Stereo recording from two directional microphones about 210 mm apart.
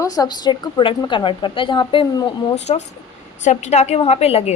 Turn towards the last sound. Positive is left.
turn(degrees=30)  # may be behind; listen again after turning